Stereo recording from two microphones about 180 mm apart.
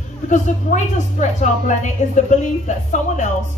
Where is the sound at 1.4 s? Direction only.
45° left (ahead or behind).